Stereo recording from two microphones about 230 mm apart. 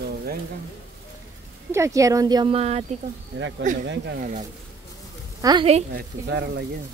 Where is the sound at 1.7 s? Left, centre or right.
Centre.